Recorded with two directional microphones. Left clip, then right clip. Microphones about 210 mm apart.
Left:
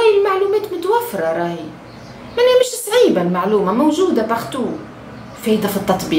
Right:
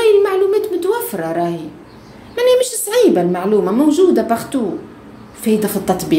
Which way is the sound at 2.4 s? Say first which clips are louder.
Left 1 dB; 40° right (ahead or behind).